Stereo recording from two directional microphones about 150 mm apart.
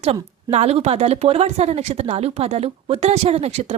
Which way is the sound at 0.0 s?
45° right (ahead or behind).